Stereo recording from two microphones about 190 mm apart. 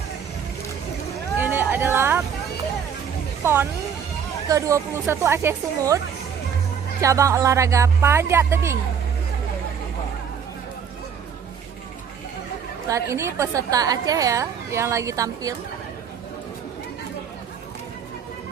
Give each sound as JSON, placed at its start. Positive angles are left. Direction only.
{"t": 1.4, "sound": "a sound", "side_deg": -10}
{"t": 3.4, "sound": "a woman's voice", "side_deg": -10}
{"t": 7.0, "sound": "a woman's voice", "side_deg": -15}
{"t": 12.9, "sound": "a woman's voice", "side_deg": -15}